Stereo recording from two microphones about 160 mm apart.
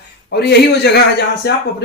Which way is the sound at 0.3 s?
90° left.